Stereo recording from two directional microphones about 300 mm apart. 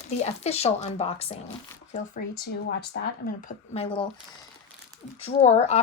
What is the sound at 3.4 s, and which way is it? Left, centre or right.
Speech, left.